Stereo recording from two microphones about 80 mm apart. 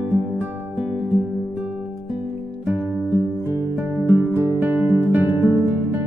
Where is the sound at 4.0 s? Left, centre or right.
Right.